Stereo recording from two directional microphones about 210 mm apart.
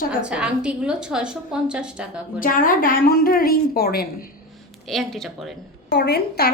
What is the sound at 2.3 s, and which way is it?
A woman's voice, 40° left (ahead or behind).